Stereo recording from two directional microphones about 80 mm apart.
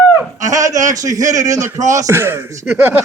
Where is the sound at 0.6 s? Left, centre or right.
Right.